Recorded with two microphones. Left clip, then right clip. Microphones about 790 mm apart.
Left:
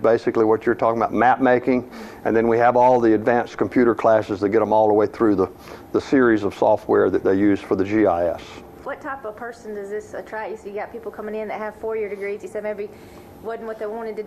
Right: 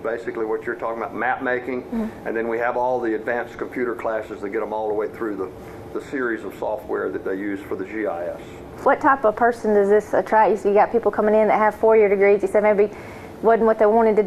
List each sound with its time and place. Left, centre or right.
0.0 s speech: left
6.0 s speech: left
8.9 s a woman's voice: right